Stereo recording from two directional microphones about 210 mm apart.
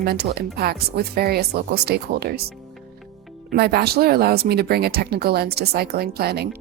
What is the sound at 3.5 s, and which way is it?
Speech, 50° right (ahead or behind).